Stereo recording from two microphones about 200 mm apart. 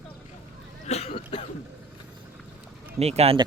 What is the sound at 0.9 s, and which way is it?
Throat clearing, 30° left (ahead or behind).